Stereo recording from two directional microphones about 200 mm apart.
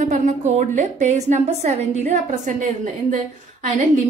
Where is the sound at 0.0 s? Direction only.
40° right (ahead or behind).